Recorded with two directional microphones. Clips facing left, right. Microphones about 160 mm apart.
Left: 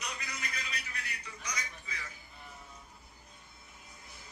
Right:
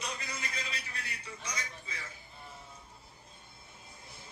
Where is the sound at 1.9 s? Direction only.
30° right (ahead or behind).